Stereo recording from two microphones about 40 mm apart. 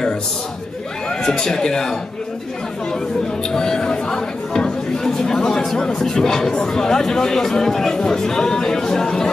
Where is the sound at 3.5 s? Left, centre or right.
Centre.